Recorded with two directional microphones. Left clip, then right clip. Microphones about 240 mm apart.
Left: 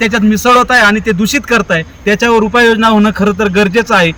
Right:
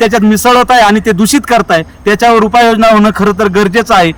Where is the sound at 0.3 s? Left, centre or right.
Centre.